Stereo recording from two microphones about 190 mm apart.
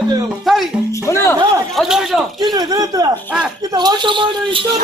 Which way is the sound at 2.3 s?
20° right (ahead or behind).